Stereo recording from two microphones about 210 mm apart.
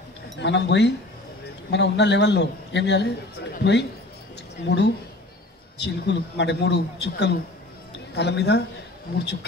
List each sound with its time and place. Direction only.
0.4 s a man's voice: 55° left (ahead or behind)